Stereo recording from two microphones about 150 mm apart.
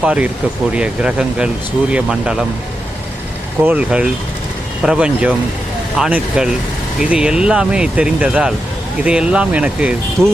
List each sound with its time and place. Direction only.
0.0 s speech: 5° right (ahead or behind)
3.6 s speech: 10° right (ahead or behind)